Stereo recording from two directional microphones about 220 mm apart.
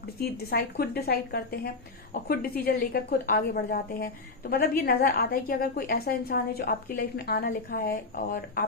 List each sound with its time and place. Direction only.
0.2 s a woman's voice: 45° left (ahead or behind)